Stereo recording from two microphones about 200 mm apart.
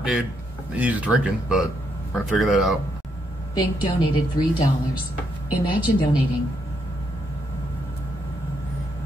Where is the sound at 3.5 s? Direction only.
20° left (ahead or behind).